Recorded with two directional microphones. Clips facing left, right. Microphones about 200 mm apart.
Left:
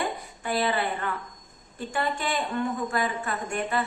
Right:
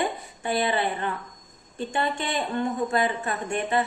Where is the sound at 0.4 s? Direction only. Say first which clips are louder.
Right 2 dB; 20° right (ahead or behind).